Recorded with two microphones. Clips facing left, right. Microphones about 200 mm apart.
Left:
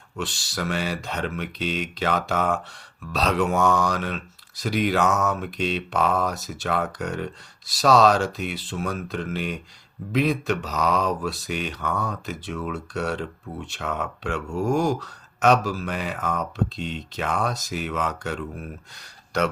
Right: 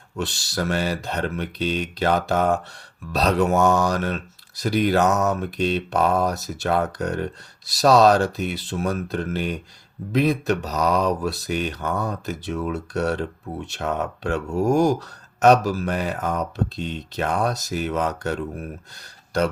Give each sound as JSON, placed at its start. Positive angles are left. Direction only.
{"t": 0.2, "sound": "speech", "side_deg": -40}